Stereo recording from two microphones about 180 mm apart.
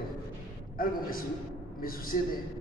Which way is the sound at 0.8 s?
55° left (ahead or behind).